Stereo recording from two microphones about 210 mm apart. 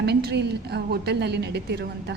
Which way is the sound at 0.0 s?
50° right (ahead or behind).